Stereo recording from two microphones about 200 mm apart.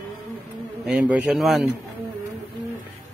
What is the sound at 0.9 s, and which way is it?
Speech, 5° right (ahead or behind).